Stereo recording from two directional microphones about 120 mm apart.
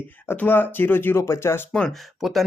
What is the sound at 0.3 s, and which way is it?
Speech, 15° left (ahead or behind).